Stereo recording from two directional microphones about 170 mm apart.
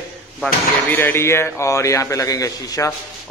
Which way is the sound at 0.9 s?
15° left (ahead or behind).